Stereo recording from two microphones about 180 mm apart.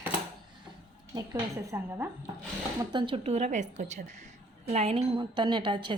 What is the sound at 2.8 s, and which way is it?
A woman's voice, 25° right (ahead or behind).